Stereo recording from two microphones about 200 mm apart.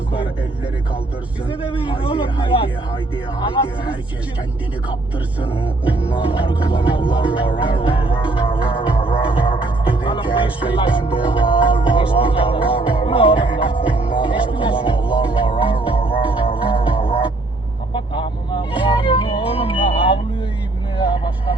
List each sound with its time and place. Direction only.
1.5 s music: 25° left (ahead or behind)
5.4 s music: 25° left (ahead or behind)
5.9 s music: 5° right (ahead or behind)
6.1 s music: 25° left (ahead or behind)
21.0 s vehicle: 25° left (ahead or behind)